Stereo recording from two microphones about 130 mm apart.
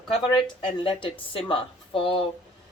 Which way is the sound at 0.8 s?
40° left (ahead or behind).